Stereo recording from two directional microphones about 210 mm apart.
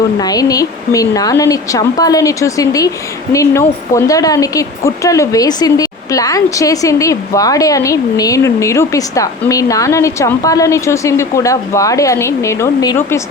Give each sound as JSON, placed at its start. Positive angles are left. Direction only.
{"t": 0.2, "sound": "a woman's voice", "side_deg": 15}